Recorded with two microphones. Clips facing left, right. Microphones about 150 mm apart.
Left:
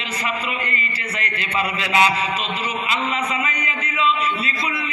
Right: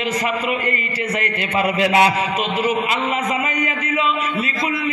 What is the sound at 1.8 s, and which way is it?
Speech, 50° right (ahead or behind).